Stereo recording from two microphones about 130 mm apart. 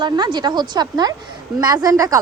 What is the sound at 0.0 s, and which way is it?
Speech, 35° right (ahead or behind).